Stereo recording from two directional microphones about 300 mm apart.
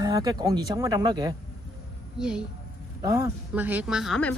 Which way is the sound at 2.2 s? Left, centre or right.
Centre.